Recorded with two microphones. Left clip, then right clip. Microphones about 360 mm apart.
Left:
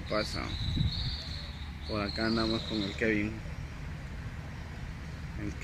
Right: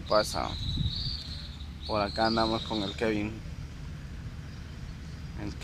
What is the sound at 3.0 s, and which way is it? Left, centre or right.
Speech, right.